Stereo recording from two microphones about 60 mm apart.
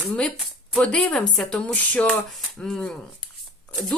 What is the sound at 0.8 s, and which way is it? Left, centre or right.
Speech, centre.